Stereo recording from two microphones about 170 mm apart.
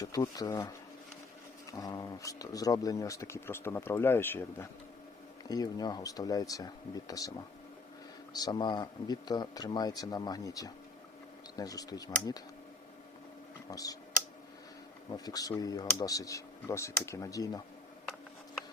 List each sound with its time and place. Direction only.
0.0 s speech: 20° left (ahead or behind)
1.7 s speech: 20° left (ahead or behind)
13.7 s speech: 20° left (ahead or behind)
15.1 s speech: 20° left (ahead or behind)